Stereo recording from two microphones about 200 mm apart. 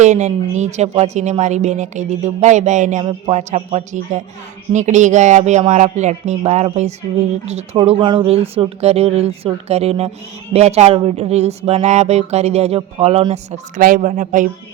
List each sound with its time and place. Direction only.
0.0 s a woman's voice: 35° right (ahead or behind)